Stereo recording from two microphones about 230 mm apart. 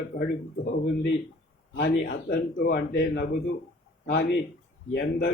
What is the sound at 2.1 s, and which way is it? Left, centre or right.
A man's voice, left.